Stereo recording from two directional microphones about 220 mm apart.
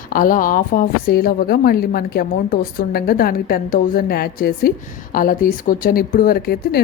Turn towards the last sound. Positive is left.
turn(degrees=45)  # may be behind; listen again after turning